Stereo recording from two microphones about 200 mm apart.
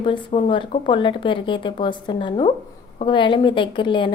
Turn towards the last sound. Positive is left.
turn(degrees=25)  # may be behind; listen again after turning